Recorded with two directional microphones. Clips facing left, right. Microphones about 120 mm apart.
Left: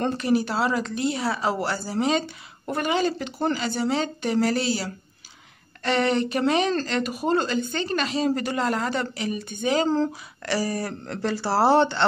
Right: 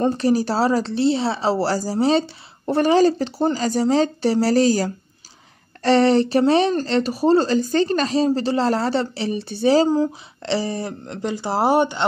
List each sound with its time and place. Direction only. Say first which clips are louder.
0.2 s speech: right 4 dB; 35° right (ahead or behind); by 12.0 s 15° right (ahead or behind)